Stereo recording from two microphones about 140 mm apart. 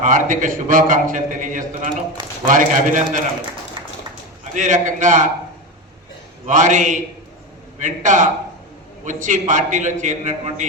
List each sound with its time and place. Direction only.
0.0 s a man's voice: 70° right (ahead or behind)
4.5 s a man's voice: 65° right (ahead or behind)
6.4 s a man's voice: 65° right (ahead or behind)